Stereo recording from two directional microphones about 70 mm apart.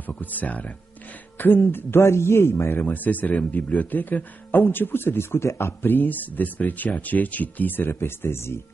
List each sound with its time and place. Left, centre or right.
0.2 s a man's voice: left
2.0 s a man's voice: left